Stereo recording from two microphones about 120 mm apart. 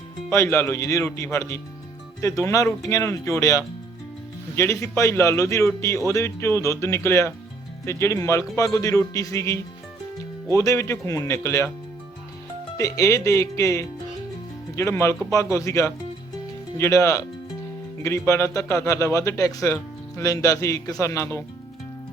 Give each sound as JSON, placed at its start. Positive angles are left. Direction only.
{"t": 0.3, "sound": "a man's voice", "side_deg": 25}
{"t": 12.7, "sound": "a man's voice", "side_deg": 25}